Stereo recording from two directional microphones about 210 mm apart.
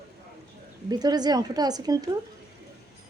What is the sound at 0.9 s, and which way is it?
Speech, 20° right (ahead or behind).